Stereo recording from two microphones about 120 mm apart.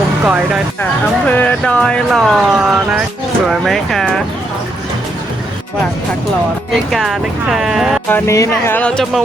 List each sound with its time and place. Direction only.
0.3 s speech: 10° right (ahead or behind)
1.3 s speech: 15° left (ahead or behind)
6.9 s speech: 5° right (ahead or behind)
8.0 s speech: 15° left (ahead or behind)
8.8 s speech: 5° left (ahead or behind)